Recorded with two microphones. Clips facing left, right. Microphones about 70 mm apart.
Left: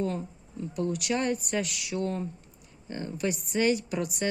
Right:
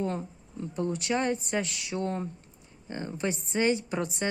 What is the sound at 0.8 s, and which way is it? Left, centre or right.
Speech, right.